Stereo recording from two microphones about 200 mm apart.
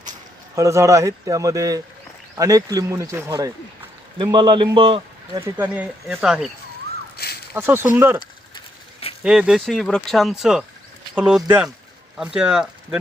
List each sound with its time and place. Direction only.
0.5 s a man's voice: 15° right (ahead or behind)
5.4 s a man's voice: 10° right (ahead or behind)
7.5 s a man's voice: 10° right (ahead or behind)
8.5 s mechanisms: 30° left (ahead or behind)
9.2 s speech: 5° right (ahead or behind)